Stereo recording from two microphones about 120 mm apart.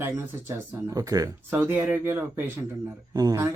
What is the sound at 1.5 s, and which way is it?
Speech, 20° right (ahead or behind).